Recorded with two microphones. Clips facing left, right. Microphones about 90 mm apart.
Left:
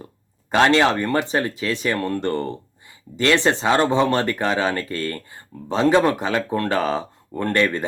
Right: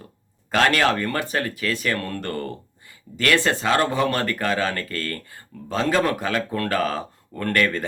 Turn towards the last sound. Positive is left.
turn(degrees=20)  # may be behind; listen again after turning